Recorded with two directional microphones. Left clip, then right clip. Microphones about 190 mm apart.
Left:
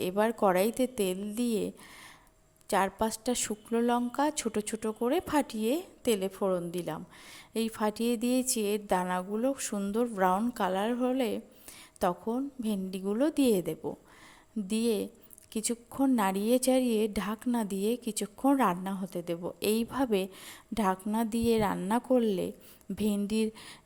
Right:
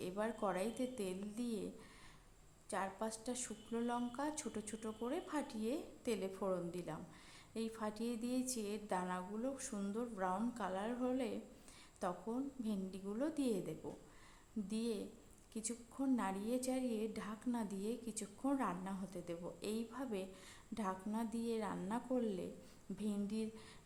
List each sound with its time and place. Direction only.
0.0 s a woman's voice: 40° left (ahead or behind)